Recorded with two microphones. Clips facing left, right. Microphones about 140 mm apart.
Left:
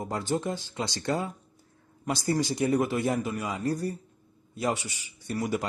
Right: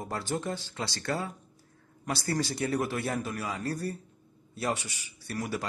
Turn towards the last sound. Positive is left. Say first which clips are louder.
# left 4 dB
turn(degrees=15)  # may be behind; listen again after turning